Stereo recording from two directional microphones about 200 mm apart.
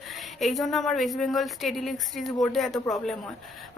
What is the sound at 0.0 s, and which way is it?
Speech, centre (ahead or behind).